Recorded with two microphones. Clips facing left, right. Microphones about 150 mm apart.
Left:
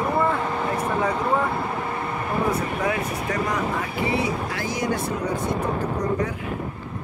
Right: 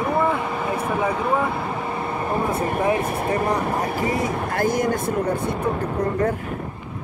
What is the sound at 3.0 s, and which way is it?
Speech, 50° right (ahead or behind).